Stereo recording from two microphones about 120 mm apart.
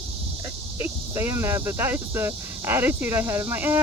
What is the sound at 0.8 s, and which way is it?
Speech, 20° right (ahead or behind).